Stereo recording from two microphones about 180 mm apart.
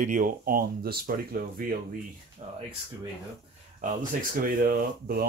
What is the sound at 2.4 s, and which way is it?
Speech, 35° right (ahead or behind).